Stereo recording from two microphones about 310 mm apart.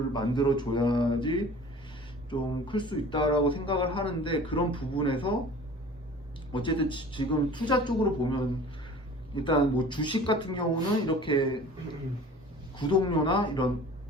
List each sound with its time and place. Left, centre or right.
0.1 s a man's voice: centre
6.5 s a man's voice: centre
12.7 s a man's voice: centre